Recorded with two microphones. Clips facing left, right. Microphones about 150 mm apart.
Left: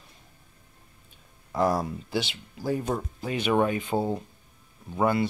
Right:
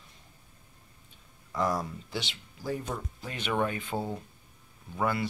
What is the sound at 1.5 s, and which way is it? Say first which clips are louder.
Speech: left 5 dB; 35° left (ahead or behind).